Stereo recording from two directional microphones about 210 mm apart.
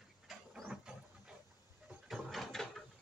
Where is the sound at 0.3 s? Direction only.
Centre (ahead or behind).